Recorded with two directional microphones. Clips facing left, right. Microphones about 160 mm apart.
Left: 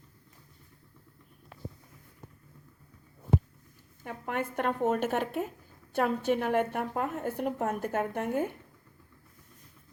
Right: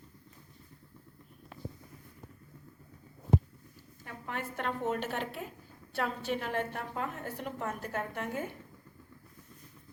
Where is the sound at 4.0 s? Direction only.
55° left (ahead or behind).